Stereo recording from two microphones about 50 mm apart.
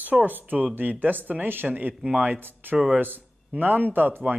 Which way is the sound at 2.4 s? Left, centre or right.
Right.